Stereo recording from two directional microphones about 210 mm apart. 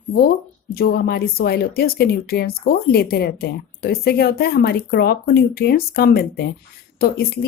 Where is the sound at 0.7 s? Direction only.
50° left (ahead or behind).